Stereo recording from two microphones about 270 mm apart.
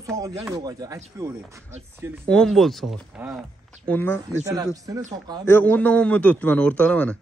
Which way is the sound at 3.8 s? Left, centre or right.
Centre.